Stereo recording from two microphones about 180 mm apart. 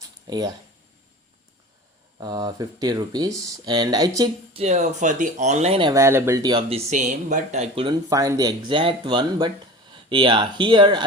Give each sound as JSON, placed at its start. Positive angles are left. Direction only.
{"t": 0.3, "sound": "speech", "side_deg": -20}
{"t": 2.1, "sound": "speech", "side_deg": -25}
{"t": 4.5, "sound": "speech", "side_deg": -35}
{"t": 5.8, "sound": "speech", "side_deg": -15}
{"t": 6.9, "sound": "speech", "side_deg": -45}
{"t": 8.1, "sound": "speech", "side_deg": -20}